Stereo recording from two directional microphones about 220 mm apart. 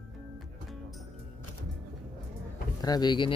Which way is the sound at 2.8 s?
20° left (ahead or behind).